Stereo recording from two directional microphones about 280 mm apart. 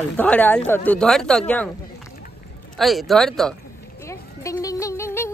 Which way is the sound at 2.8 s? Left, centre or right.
Centre.